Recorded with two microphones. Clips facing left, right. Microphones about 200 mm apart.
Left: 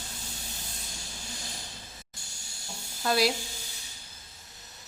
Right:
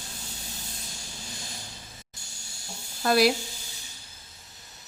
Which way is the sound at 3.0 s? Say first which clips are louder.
Right 5 dB; 60° right (ahead or behind).